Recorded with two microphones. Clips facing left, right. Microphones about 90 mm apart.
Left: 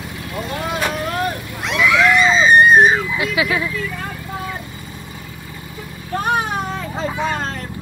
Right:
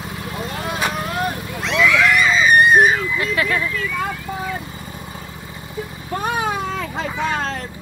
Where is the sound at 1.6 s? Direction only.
15° left (ahead or behind).